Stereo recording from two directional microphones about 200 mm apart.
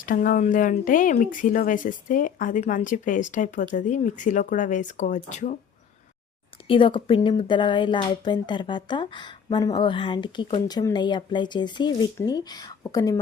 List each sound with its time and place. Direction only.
0.0 s speech: 40° left (ahead or behind)
6.7 s speech: 25° left (ahead or behind)